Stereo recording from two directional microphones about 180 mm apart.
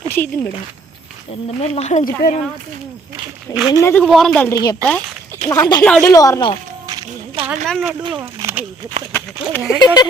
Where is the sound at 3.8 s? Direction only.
15° left (ahead or behind).